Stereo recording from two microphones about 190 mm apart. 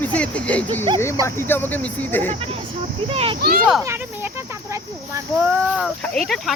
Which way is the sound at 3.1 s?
30° right (ahead or behind).